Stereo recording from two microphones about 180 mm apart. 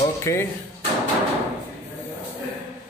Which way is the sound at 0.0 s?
15° left (ahead or behind).